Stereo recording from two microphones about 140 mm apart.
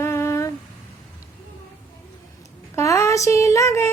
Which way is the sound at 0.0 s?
20° left (ahead or behind).